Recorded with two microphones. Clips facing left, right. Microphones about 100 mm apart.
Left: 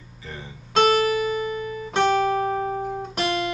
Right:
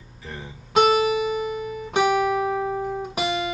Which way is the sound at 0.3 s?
5° right (ahead or behind).